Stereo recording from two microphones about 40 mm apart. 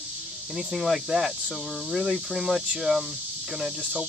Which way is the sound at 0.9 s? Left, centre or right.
Centre.